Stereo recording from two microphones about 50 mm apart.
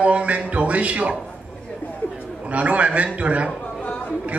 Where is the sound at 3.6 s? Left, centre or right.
Left.